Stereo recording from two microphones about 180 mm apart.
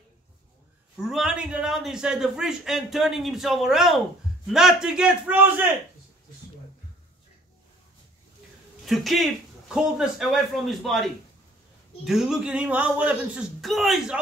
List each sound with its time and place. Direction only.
0.9 s a man's voice: centre (ahead or behind)
8.8 s a man's voice: centre (ahead or behind)